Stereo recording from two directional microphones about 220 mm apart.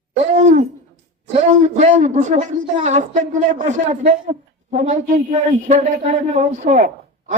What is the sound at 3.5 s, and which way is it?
A woman's voice, 35° right (ahead or behind).